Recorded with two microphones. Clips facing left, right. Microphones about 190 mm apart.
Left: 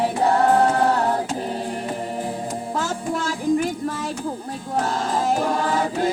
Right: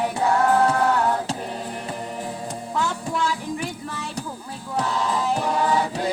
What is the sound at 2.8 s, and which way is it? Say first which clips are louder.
Music: right 1 dB; 45° left (ahead or behind).